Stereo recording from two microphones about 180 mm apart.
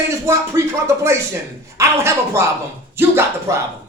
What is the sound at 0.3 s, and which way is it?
A man's voice, 15° right (ahead or behind).